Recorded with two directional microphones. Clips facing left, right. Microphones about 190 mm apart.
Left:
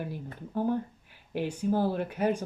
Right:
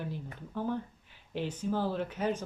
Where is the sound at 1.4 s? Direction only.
10° left (ahead or behind).